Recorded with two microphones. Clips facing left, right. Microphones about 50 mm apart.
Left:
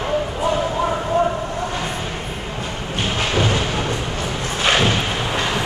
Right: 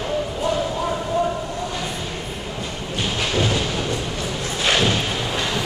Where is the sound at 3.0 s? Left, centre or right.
Left.